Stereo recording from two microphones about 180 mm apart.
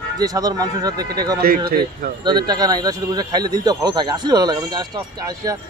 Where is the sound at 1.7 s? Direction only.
55° right (ahead or behind).